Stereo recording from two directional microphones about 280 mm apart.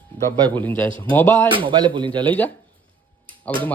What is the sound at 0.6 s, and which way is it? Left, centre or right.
Speech, centre.